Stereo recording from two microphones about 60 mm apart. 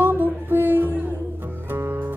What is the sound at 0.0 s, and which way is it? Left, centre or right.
Music, right.